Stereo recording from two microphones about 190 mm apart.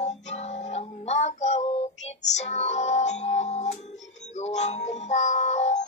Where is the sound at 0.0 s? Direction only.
35° left (ahead or behind).